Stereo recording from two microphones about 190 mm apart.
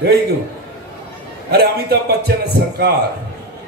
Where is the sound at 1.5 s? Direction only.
55° right (ahead or behind).